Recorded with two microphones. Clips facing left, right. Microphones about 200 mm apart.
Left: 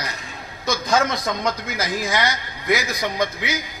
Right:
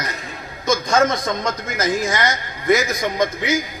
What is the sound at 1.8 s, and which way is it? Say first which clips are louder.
Speech: right 4 dB; 45° right (ahead or behind).